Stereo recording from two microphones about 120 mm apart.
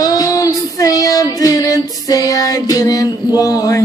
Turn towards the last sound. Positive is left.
turn(degrees=30)  # may be behind; listen again after turning